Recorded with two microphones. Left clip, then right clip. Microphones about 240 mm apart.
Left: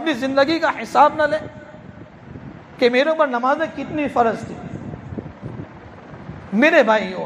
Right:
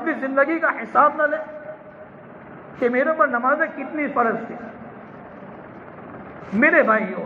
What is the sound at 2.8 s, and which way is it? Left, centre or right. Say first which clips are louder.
Speech: left 3 dB; left.